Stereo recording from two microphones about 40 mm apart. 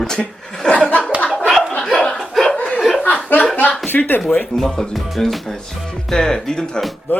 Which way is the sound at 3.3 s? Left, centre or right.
Left.